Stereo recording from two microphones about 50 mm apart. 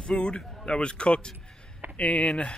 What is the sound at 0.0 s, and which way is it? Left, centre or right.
A man's voice, centre.